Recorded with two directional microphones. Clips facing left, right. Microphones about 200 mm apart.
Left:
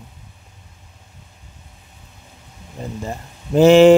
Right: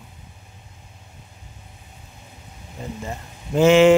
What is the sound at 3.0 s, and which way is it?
Speech, 35° left (ahead or behind).